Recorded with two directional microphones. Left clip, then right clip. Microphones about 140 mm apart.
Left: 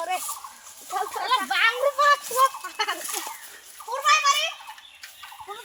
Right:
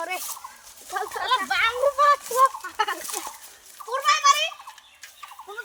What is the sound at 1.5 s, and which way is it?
Speech, 45° right (ahead or behind).